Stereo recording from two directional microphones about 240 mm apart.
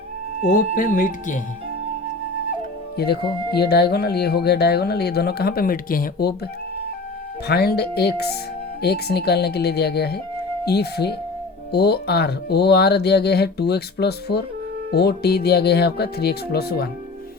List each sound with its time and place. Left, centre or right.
0.4 s speech: left
3.5 s speech: left
7.4 s speech: left